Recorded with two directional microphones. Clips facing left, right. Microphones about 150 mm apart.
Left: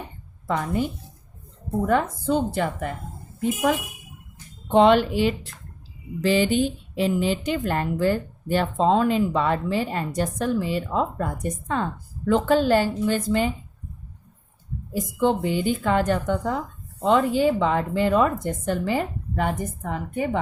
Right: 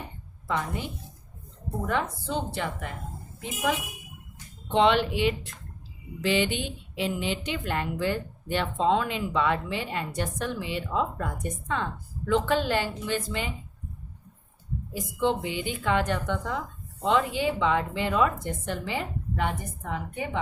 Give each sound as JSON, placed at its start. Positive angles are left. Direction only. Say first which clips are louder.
{"t": 0.4, "sound": "a woman's voice", "louder": "left 6 dB", "side_deg": 45}
{"t": 1.9, "sound": "a woman's voice", "louder": "left 7 dB", "side_deg": 45}
{"t": 14.9, "sound": "a woman's voice", "louder": "left 5 dB", "side_deg": 45}